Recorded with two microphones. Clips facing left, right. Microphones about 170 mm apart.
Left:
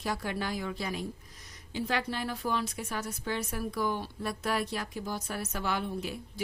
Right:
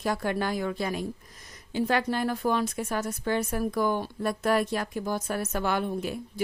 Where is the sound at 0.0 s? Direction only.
50° right (ahead or behind).